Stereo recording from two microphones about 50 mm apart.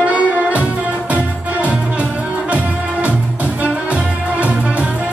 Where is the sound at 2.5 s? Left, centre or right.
Right.